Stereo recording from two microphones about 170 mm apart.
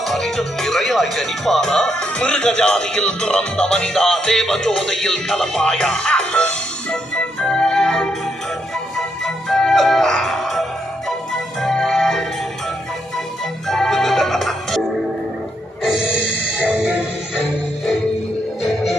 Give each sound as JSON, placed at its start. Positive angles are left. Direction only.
{"t": 0.0, "sound": "speech", "side_deg": 0}
{"t": 9.0, "sound": "music", "side_deg": 0}
{"t": 13.7, "sound": "music", "side_deg": 0}
{"t": 15.8, "sound": "music", "side_deg": -5}